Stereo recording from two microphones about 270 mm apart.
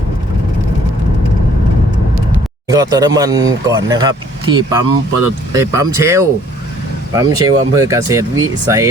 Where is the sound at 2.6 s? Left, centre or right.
Centre.